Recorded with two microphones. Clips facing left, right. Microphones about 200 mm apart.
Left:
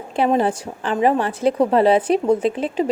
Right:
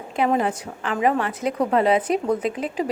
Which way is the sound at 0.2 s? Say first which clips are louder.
Left 3 dB; 30° left (ahead or behind).